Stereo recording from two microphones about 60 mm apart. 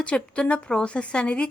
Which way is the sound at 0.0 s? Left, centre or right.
Centre.